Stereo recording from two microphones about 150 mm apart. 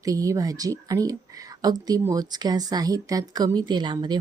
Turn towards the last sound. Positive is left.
turn(degrees=-30)  # may be behind; listen again after turning